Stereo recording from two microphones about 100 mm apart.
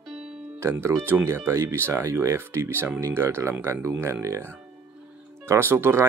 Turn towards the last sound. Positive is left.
turn(degrees=-25)  # may be behind; listen again after turning